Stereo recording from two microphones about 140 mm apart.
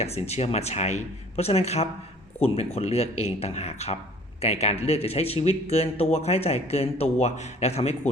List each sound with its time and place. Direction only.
0.0 s speech: 50° left (ahead or behind)